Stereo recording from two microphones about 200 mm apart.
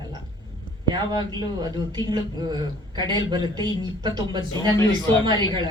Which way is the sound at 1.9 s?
20° right (ahead or behind).